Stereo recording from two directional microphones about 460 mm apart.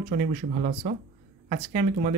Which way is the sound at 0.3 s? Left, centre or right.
Centre.